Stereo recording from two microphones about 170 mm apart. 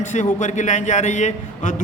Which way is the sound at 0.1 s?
45° left (ahead or behind).